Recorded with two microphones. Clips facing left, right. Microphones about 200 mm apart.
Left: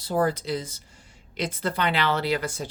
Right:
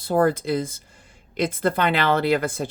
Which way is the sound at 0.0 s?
55° right (ahead or behind).